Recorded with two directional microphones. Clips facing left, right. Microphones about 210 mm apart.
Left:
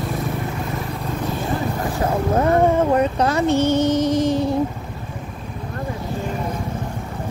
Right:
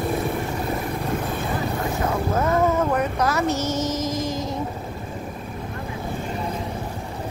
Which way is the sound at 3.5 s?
60° left (ahead or behind).